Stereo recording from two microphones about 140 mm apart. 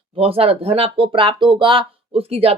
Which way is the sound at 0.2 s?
45° right (ahead or behind).